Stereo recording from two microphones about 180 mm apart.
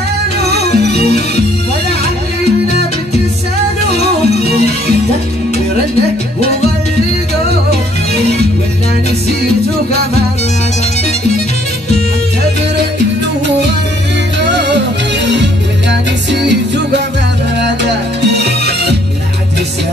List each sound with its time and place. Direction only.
0.7 s music: 65° right (ahead or behind)
14.4 s music: 75° right (ahead or behind)
18.4 s music: 70° right (ahead or behind)